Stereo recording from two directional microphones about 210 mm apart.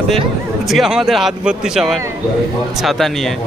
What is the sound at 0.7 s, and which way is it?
A man's voice, centre (ahead or behind).